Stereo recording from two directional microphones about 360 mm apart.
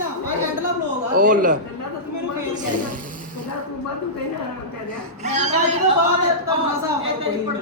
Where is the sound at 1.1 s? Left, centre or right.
Right.